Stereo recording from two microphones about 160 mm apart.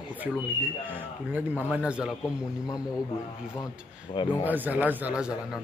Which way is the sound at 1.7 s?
5° right (ahead or behind).